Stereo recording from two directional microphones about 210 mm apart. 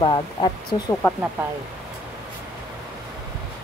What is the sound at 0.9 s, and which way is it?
Speech, 10° left (ahead or behind).